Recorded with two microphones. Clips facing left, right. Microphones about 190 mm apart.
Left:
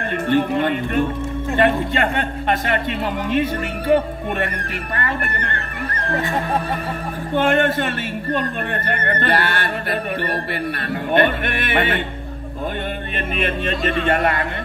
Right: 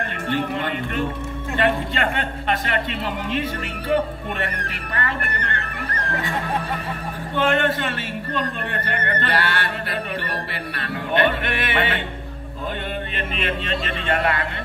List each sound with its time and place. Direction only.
0.3 s speech: 50° left (ahead or behind)
4.9 s speech: 45° left (ahead or behind)
7.3 s speech: 50° left (ahead or behind)
13.4 s speech: 50° left (ahead or behind)